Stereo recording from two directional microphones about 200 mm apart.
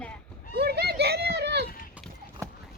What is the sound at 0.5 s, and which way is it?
Children playing, 55° right (ahead or behind).